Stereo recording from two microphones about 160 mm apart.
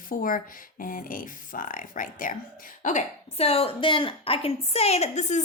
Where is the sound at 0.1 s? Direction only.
60° left (ahead or behind).